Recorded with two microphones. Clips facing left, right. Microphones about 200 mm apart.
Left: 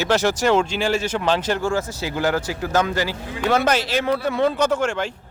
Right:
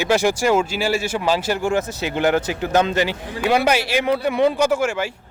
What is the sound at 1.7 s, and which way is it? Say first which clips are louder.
Speech: right 2 dB; 20° right (ahead or behind).